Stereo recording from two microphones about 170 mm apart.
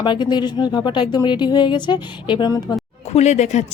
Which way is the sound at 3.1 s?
40° left (ahead or behind).